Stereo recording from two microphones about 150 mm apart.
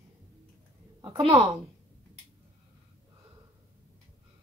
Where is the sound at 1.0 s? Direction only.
30° right (ahead or behind).